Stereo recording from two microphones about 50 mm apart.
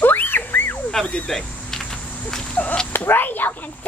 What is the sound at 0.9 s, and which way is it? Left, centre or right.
Cricket, centre.